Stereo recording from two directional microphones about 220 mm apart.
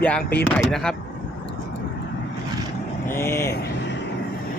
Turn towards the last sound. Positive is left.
turn(degrees=10)  # may be behind; listen again after turning